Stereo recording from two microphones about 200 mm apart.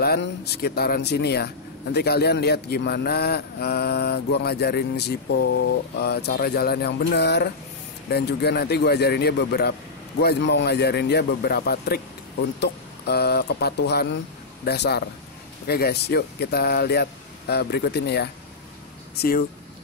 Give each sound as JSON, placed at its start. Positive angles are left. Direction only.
{"t": 0.0, "sound": "a man's voice", "side_deg": 55}